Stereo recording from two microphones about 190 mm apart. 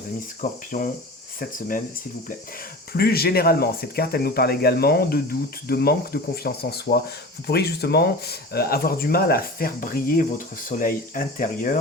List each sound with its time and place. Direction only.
0.4 s speech: 45° left (ahead or behind)
2.9 s speech: 55° left (ahead or behind)